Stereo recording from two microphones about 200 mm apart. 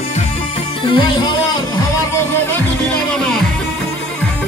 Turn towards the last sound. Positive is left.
turn(degrees=5)  # may be behind; listen again after turning